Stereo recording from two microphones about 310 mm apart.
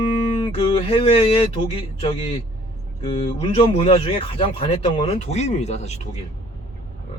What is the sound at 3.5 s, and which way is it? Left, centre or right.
Speech, centre.